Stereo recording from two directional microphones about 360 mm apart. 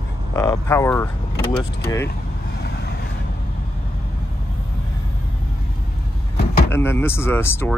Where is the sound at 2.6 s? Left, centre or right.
Left.